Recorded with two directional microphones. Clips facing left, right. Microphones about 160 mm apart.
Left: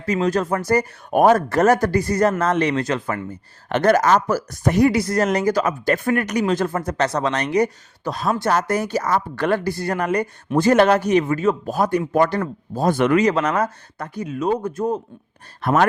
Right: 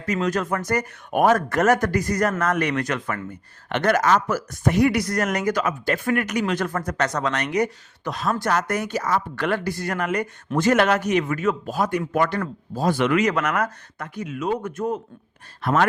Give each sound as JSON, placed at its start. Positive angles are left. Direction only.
{"t": 0.0, "sound": "speech", "side_deg": 30}
{"t": 12.7, "sound": "speech", "side_deg": 45}
{"t": 13.1, "sound": "speech", "side_deg": 30}